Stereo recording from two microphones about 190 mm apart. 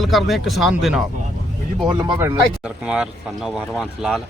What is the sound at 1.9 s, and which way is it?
Speech, 20° right (ahead or behind).